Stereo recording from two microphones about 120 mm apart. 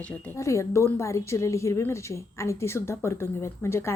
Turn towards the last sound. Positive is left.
turn(degrees=20)  # may be behind; listen again after turning